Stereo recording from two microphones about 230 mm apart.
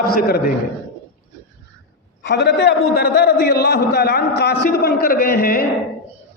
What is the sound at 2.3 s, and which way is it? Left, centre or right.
A man's voice, left.